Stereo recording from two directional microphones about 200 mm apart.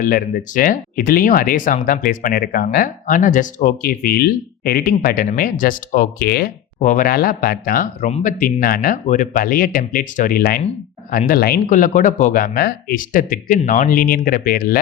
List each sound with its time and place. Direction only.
0.0 s speech: 45° left (ahead or behind)
6.7 s speech: 40° left (ahead or behind)